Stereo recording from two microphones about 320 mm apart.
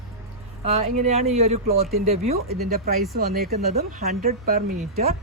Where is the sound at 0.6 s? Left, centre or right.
Centre.